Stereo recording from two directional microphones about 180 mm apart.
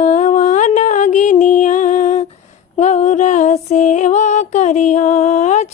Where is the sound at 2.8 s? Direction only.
40° left (ahead or behind).